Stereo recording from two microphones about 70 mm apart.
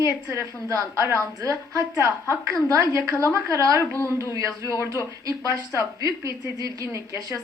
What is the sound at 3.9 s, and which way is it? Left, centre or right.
Speech, left.